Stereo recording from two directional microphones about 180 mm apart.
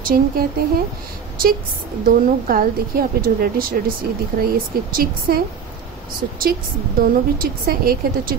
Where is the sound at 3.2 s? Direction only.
55° right (ahead or behind).